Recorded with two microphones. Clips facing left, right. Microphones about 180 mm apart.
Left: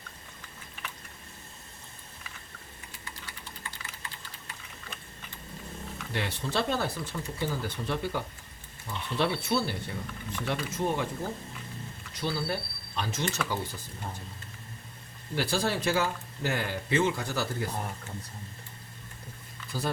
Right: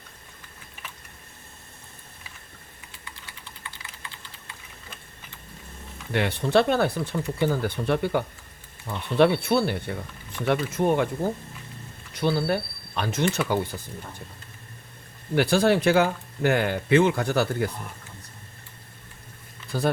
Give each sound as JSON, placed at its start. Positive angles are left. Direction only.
{"t": 6.1, "sound": "speech", "side_deg": -60}
{"t": 12.1, "sound": "speech", "side_deg": -60}
{"t": 15.4, "sound": "speech", "side_deg": -60}
{"t": 19.7, "sound": "speech", "side_deg": -60}